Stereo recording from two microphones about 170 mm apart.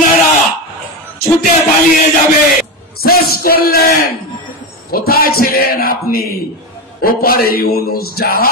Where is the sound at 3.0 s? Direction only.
60° left (ahead or behind).